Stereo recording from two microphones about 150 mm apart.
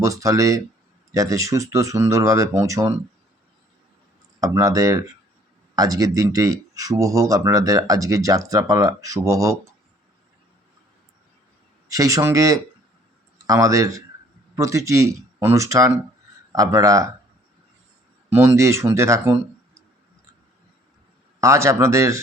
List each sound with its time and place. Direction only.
0.0 s speech: 20° right (ahead or behind)
4.4 s speech: 20° right (ahead or behind)
11.9 s speech: 20° right (ahead or behind)
18.3 s speech: 15° right (ahead or behind)
21.4 s speech: 20° right (ahead or behind)